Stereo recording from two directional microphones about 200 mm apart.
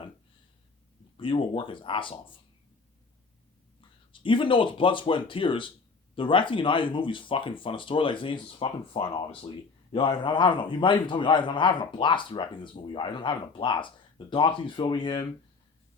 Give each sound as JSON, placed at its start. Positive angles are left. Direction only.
{"t": 1.1, "sound": "a man's voice", "side_deg": 25}
{"t": 3.8, "sound": "a man's voice", "side_deg": 25}